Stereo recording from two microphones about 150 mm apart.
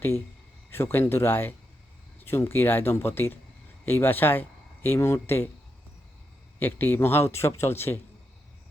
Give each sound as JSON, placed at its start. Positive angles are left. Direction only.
{"t": 0.7, "sound": "speech", "side_deg": 15}
{"t": 6.6, "sound": "speech", "side_deg": 15}